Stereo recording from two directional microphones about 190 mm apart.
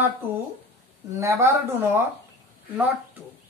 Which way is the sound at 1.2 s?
15° right (ahead or behind).